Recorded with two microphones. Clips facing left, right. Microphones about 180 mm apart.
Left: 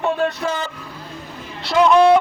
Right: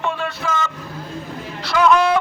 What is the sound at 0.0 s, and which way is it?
Vehicle, 40° left (ahead or behind).